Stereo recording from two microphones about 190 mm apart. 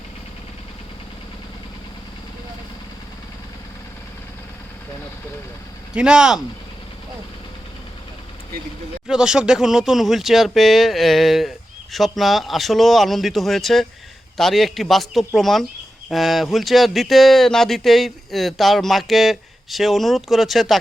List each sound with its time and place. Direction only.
5.9 s speech: 5° right (ahead or behind)
9.0 s speech: 5° right (ahead or behind)